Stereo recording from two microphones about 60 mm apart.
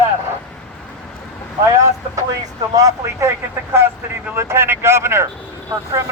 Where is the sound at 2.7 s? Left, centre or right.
Right.